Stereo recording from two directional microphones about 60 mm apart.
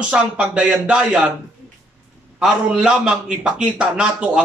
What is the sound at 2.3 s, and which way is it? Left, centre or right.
A man's voice, centre.